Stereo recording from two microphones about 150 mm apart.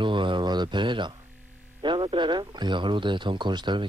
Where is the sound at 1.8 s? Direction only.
35° right (ahead or behind).